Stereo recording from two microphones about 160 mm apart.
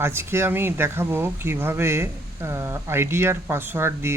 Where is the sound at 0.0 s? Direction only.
15° right (ahead or behind).